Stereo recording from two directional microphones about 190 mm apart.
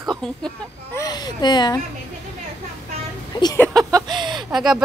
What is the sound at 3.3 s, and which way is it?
Speech, 20° left (ahead or behind).